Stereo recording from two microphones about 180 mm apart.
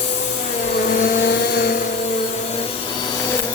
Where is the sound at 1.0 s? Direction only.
65° left (ahead or behind).